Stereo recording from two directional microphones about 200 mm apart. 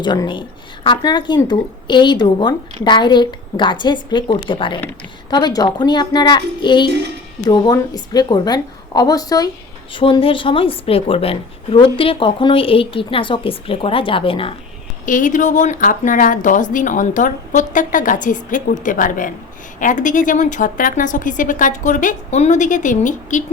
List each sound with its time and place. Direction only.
0.0 s a woman's voice: 20° left (ahead or behind)
15.0 s a woman's voice: 40° left (ahead or behind)